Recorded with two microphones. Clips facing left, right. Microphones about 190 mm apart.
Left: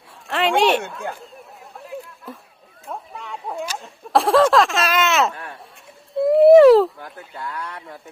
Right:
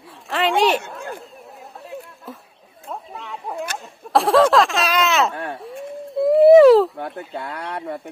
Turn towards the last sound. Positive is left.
turn(degrees=-65)  # may be behind; listen again after turning